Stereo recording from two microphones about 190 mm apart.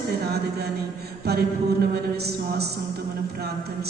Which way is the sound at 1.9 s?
60° right (ahead or behind).